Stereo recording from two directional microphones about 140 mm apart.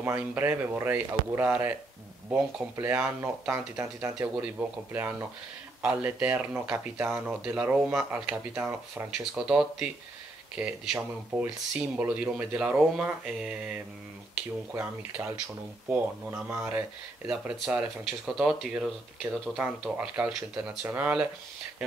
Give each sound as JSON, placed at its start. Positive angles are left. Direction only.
{"t": 0.0, "sound": "speech", "side_deg": -15}
{"t": 14.7, "sound": "speech", "side_deg": -15}